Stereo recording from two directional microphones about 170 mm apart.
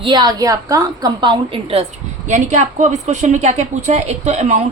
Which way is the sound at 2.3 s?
45° right (ahead or behind).